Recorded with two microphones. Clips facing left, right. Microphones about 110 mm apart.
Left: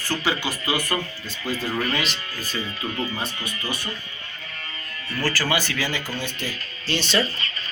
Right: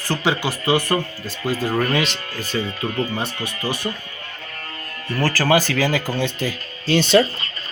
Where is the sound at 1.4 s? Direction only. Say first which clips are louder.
Right 5 dB; 45° right (ahead or behind).